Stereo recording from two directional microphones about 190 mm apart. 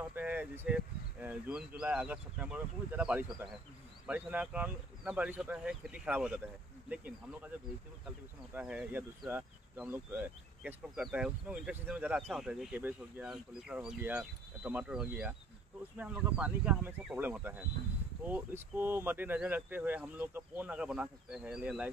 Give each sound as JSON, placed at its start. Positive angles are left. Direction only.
{"t": 0.1, "sound": "speech", "side_deg": -10}
{"t": 8.5, "sound": "speech", "side_deg": -5}